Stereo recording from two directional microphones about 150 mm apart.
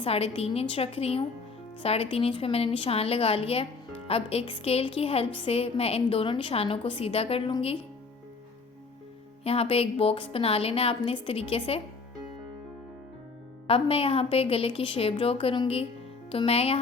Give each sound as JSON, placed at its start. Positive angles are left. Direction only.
{"t": 0.0, "sound": "a woman's voice", "side_deg": 40}
{"t": 9.4, "sound": "a woman's voice", "side_deg": 40}
{"t": 13.7, "sound": "a woman's voice", "side_deg": 40}